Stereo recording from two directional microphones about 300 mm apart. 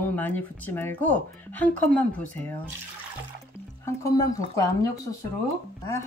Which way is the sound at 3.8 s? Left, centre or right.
Centre.